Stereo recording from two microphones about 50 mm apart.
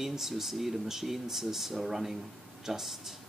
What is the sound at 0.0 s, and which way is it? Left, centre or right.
Speech, centre.